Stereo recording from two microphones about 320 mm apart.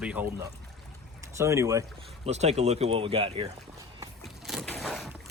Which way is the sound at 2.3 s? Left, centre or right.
Right.